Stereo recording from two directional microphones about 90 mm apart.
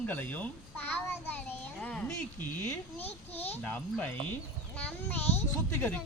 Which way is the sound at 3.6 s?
15° left (ahead or behind).